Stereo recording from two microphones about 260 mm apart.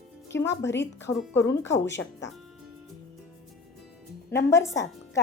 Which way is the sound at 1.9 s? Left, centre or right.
Left.